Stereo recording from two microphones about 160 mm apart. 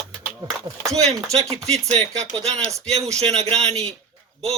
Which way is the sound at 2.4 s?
40° right (ahead or behind).